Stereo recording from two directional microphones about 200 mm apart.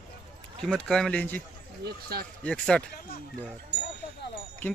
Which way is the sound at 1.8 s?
50° right (ahead or behind).